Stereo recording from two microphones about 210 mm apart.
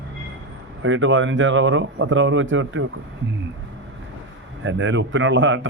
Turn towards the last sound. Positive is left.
turn(degrees=-65)  # may be behind; listen again after turning